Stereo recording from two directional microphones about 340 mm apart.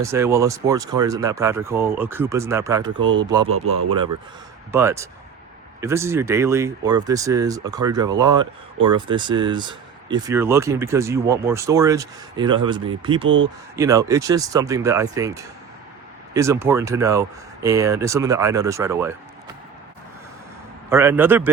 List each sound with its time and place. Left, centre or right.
0.0 s speech: centre
3.0 s speech: right
4.7 s speech: centre
13.2 s speech: right
13.7 s speech: centre
20.9 s a man's voice: centre